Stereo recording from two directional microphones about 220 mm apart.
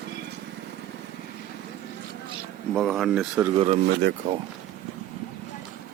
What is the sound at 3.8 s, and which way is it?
Speech, 50° right (ahead or behind).